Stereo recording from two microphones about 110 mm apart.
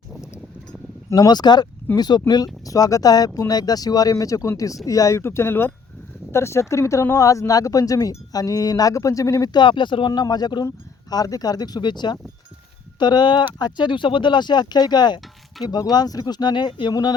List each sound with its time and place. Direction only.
1.1 s speech: 40° left (ahead or behind)